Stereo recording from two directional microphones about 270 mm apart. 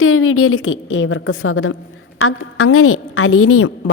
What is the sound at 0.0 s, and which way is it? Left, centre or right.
A woman's voice, left.